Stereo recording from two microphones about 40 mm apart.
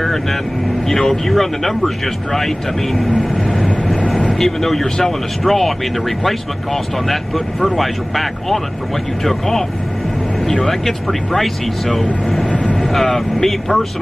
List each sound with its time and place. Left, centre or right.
0.0 s speech: centre
3.2 s speech: left
3.6 s vehicle: centre
4.3 s speech: centre
12.4 s speech: left
12.7 s speech: centre